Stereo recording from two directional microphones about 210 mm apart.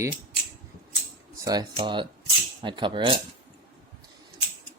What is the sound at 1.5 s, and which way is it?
Speech, 20° right (ahead or behind).